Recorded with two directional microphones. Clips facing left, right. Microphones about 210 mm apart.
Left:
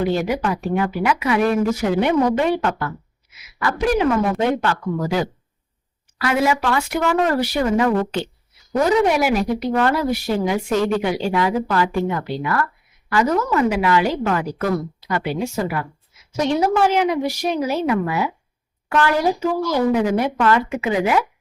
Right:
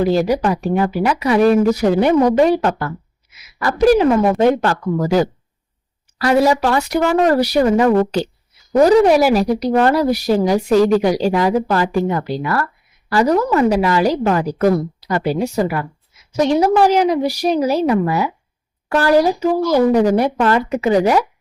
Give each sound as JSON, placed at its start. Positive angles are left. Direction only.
{"t": 0.0, "sound": "a woman's voice", "side_deg": -35}